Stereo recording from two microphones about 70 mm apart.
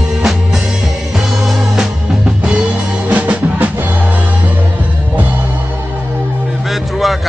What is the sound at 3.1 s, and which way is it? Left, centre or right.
Music, right.